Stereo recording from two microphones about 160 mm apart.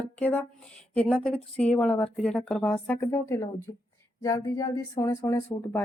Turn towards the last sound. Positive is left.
turn(degrees=15)  # may be behind; listen again after turning